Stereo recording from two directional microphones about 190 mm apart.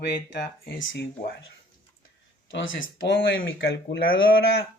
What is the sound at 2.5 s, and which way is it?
Speech, 85° left.